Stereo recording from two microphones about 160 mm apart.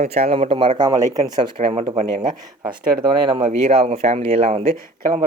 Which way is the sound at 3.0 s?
25° right (ahead or behind).